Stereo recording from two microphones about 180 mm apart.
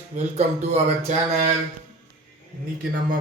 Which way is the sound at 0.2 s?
35° right (ahead or behind).